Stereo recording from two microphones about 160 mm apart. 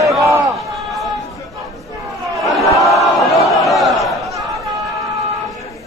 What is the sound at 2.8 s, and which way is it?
Battle cry, centre (ahead or behind).